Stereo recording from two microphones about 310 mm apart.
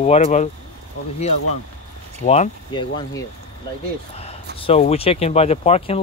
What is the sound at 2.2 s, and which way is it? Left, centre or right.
Speech, left.